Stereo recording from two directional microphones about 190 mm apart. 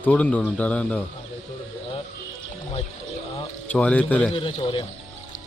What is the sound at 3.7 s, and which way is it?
Speech, 5° left (ahead or behind).